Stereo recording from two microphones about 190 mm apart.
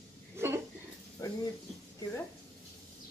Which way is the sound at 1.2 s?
15° left (ahead or behind).